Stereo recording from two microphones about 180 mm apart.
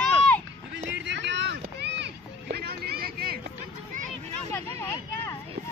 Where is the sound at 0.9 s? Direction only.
75° right (ahead or behind).